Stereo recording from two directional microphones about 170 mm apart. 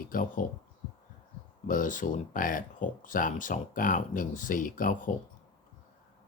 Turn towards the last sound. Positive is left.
turn(degrees=50)  # may be behind; listen again after turning